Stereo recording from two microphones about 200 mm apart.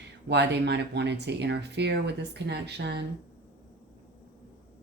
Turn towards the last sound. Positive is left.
turn(degrees=-60)  # may be behind; listen again after turning